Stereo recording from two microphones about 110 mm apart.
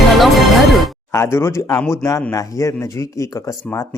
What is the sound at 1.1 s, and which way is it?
Speech, 25° left (ahead or behind).